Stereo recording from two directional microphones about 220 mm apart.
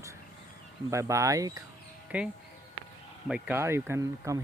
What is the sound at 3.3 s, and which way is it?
Speech, 10° right (ahead or behind).